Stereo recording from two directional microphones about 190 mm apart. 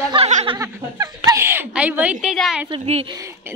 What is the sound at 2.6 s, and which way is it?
Speech, 30° right (ahead or behind).